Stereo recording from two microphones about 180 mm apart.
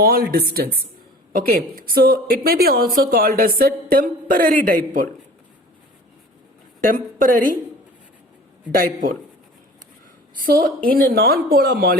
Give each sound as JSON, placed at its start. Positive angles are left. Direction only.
{"t": 0.0, "sound": "a woman's voice", "side_deg": -55}
{"t": 6.9, "sound": "a woman's voice", "side_deg": -50}
{"t": 8.7, "sound": "a woman's voice", "side_deg": -50}
{"t": 10.8, "sound": "speech", "side_deg": -55}